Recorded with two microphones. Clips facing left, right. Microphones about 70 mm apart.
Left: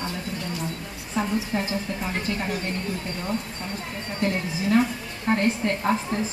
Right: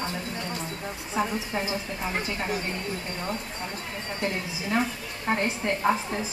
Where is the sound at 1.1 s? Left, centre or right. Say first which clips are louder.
Left 3 dB; centre.